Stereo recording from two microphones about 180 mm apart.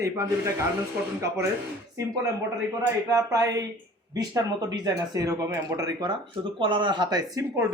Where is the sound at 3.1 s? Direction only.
20° right (ahead or behind).